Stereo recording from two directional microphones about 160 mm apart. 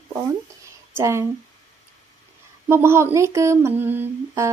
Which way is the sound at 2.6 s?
15° right (ahead or behind).